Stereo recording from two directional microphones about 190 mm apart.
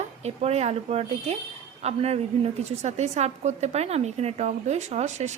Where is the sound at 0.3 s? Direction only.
35° right (ahead or behind).